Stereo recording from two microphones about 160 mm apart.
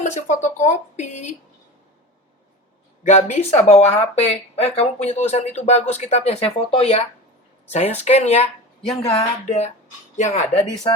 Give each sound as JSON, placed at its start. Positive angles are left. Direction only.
{"t": 0.0, "sound": "speech", "side_deg": 50}
{"t": 3.0, "sound": "speech", "side_deg": 50}